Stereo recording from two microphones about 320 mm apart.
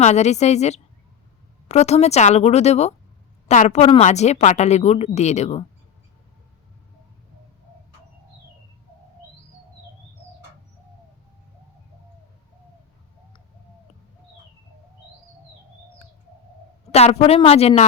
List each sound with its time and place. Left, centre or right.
0.0 s a woman's voice: left
16.9 s a woman's voice: centre